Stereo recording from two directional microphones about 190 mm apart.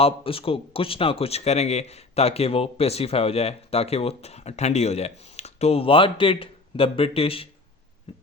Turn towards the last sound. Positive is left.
turn(degrees=30)  # may be behind; listen again after turning